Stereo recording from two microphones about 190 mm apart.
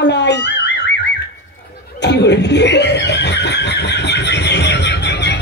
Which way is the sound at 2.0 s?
65° left (ahead or behind).